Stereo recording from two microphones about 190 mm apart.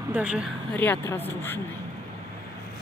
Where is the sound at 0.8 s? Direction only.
10° left (ahead or behind).